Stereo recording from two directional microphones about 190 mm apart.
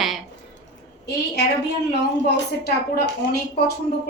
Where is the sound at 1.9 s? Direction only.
60° left (ahead or behind).